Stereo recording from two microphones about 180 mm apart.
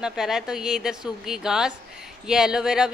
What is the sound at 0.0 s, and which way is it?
Speech, 5° right (ahead or behind).